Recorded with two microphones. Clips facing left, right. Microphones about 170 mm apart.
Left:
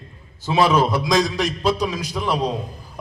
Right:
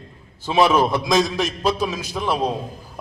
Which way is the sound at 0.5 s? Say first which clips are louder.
Right 1 dB; 15° right (ahead or behind).